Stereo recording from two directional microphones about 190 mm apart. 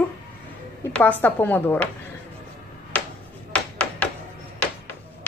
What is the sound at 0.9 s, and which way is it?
Speech, 10° left (ahead or behind).